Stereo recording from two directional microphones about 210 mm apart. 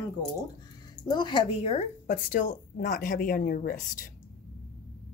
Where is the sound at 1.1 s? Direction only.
20° left (ahead or behind); by 4.1 s 40° left (ahead or behind).